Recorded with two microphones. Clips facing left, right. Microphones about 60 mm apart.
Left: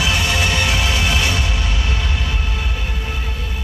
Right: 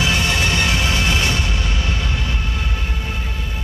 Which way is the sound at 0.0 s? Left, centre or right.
Centre.